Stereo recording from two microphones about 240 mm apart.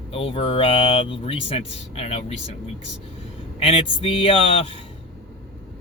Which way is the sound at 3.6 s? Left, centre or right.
Left.